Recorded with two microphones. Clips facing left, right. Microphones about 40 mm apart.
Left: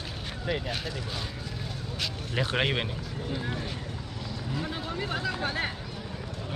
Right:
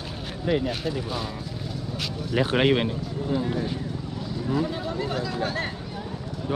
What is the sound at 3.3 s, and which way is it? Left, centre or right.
Speech, centre.